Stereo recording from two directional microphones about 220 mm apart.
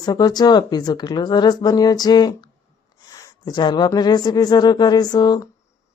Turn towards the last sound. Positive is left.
turn(degrees=20)  # may be behind; listen again after turning